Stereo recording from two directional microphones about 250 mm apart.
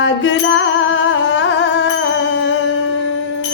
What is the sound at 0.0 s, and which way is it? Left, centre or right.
Music, left.